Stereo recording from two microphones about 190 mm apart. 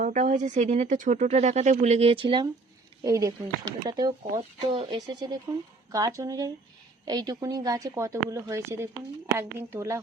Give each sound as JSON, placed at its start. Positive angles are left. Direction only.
{"t": 0.0, "sound": "a woman's voice", "side_deg": -40}